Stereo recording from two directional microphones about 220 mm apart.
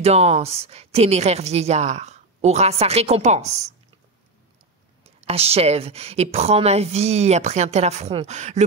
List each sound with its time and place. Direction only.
0.0 s a woman's voice: 30° right (ahead or behind)
5.0 s a woman's voice: 30° right (ahead or behind)